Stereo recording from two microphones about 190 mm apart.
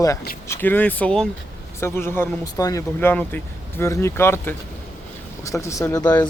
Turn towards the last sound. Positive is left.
turn(degrees=20)  # may be behind; listen again after turning